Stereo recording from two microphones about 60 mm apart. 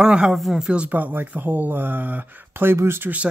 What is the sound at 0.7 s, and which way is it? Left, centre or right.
Speech, right.